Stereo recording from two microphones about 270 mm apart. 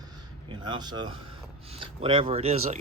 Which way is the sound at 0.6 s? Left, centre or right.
Centre.